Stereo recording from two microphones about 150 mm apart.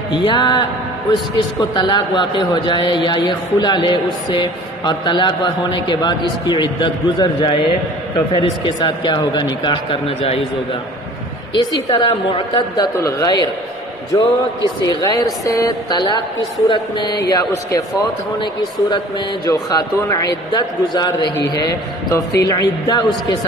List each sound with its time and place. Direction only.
0.1 s speech: 30° left (ahead or behind)
11.5 s speech: 30° left (ahead or behind)